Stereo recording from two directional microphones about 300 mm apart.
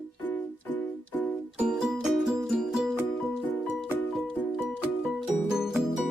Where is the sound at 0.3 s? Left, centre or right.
Centre.